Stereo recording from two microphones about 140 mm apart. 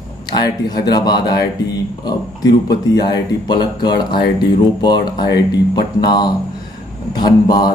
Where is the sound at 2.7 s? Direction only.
30° left (ahead or behind).